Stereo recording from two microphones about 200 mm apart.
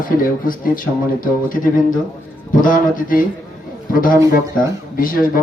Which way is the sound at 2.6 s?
40° left (ahead or behind).